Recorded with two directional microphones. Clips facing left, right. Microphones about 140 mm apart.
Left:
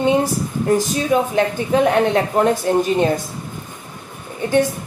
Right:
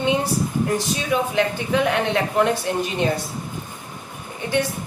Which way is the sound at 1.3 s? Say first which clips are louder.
Left 4 dB; 35° left (ahead or behind).